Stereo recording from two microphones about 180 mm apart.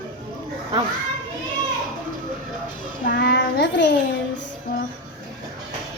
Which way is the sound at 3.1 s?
65° left (ahead or behind).